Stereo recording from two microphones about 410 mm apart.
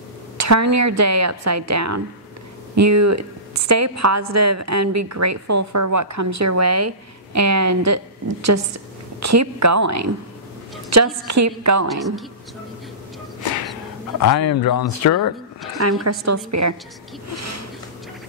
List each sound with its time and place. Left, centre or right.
0.4 s a woman's voice: right
11.9 s a woman's voice: centre
14.6 s speech: left
15.0 s speech: left
15.8 s a woman's voice: right
17.3 s a sound: right